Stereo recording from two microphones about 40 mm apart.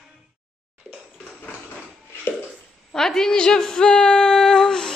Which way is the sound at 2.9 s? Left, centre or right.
Centre.